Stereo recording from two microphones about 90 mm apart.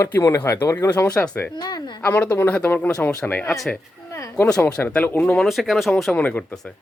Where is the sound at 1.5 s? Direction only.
50° left (ahead or behind).